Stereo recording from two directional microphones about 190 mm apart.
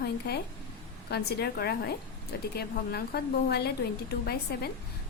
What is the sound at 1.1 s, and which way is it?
A woman's voice, 55° left (ahead or behind).